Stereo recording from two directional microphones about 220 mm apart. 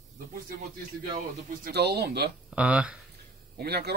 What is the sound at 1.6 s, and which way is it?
Speech, 50° right (ahead or behind).